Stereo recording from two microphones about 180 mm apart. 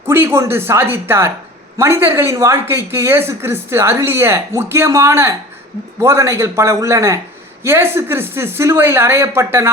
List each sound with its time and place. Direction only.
0.1 s speech: 10° right (ahead or behind)